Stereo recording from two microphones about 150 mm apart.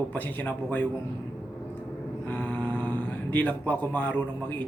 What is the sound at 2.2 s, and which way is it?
Speech, 10° left (ahead or behind).